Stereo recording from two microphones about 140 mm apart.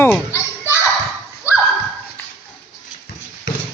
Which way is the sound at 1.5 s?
10° right (ahead or behind).